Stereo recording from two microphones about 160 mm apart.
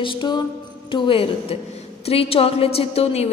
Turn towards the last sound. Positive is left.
turn(degrees=40)  # may be behind; listen again after turning